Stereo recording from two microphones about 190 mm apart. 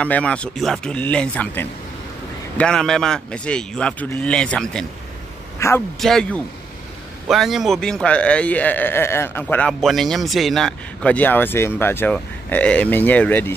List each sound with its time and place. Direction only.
0.0 s a man's voice: 5° left (ahead or behind)
5.6 s a man's voice: 15° left (ahead or behind)
5.9 s a man's voice: centre (ahead or behind)